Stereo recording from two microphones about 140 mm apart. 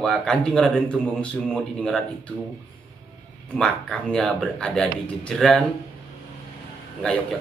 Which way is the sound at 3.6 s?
5° left (ahead or behind).